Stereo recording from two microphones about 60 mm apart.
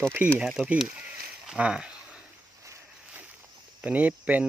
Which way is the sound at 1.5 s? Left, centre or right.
Centre.